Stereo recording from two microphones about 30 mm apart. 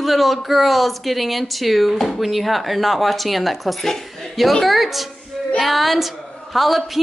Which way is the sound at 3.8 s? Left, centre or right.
Centre.